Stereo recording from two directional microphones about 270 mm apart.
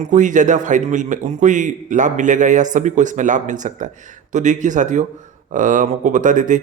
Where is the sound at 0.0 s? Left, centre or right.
Right.